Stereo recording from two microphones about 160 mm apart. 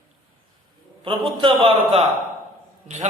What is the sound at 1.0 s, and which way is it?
A man's voice, 30° right (ahead or behind).